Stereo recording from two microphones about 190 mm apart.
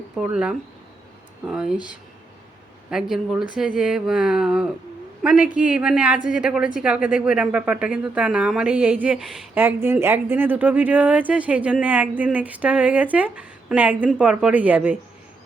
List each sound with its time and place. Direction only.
0.2 s speech: 5° right (ahead or behind)
2.9 s speech: 5° right (ahead or behind)